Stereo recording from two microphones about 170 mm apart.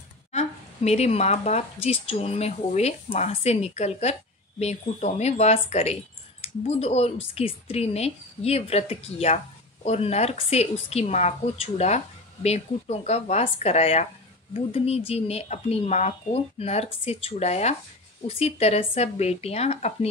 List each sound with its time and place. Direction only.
0.3 s speech: 40° left (ahead or behind)